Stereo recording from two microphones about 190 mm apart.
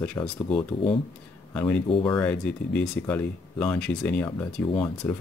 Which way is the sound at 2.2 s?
5° left (ahead or behind).